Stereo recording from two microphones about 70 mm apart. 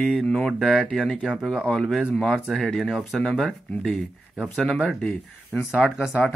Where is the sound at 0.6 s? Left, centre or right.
Centre.